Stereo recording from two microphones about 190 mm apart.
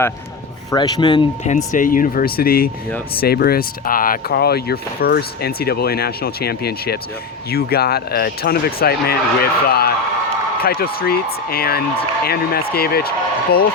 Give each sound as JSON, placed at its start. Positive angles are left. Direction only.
{"t": 0.7, "sound": "speech", "side_deg": 20}
{"t": 1.5, "sound": "speech", "side_deg": 40}